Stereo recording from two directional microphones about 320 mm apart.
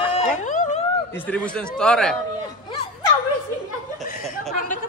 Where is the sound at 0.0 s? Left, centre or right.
Centre.